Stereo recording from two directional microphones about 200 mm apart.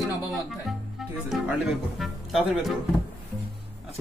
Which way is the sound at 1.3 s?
Centre (ahead or behind).